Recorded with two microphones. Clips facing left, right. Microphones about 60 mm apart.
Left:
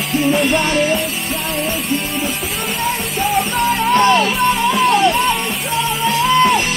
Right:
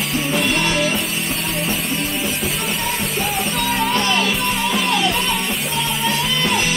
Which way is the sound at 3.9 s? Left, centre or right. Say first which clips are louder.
Left 6 dB; left.